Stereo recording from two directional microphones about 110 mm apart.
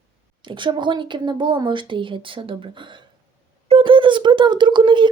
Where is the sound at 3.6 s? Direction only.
55° right (ahead or behind).